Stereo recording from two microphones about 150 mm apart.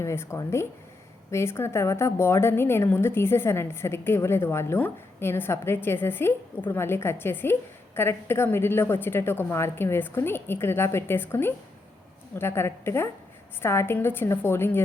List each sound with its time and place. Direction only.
0.0 s a woman's voice: 20° left (ahead or behind)